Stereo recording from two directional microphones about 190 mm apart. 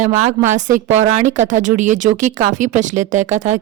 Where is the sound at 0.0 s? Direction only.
35° right (ahead or behind).